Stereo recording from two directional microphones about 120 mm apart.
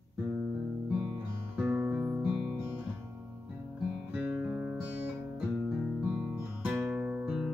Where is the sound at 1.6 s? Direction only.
15° right (ahead or behind).